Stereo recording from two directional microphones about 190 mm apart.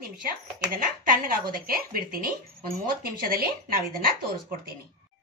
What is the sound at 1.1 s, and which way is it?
Speech, 50° right (ahead or behind).